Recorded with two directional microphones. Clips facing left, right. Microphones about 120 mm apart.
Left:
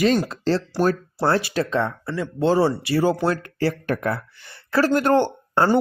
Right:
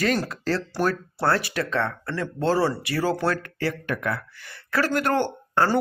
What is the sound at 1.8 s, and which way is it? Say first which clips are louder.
Speech: left 2 dB; 10° left (ahead or behind).